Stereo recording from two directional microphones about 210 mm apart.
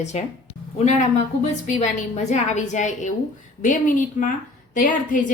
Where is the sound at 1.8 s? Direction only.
30° left (ahead or behind).